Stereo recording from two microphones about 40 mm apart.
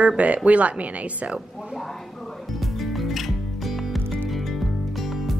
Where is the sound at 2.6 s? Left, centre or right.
Centre.